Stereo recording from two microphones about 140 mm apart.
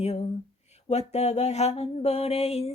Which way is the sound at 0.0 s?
50° left (ahead or behind).